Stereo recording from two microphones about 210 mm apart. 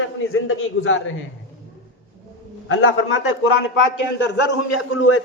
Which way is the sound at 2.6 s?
70° left (ahead or behind).